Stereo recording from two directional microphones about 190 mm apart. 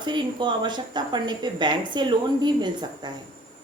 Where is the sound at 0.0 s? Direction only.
25° right (ahead or behind).